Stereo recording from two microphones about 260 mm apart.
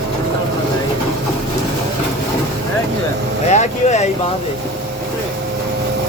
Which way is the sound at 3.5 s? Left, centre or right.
Left.